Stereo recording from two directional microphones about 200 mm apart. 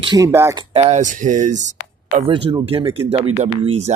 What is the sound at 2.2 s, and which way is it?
Speech, 25° right (ahead or behind).